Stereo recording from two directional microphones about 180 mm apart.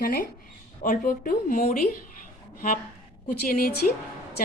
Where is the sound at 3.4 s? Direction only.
55° left (ahead or behind).